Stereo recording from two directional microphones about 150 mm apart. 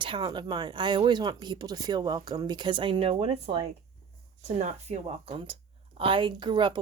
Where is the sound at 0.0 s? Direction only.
30° right (ahead or behind).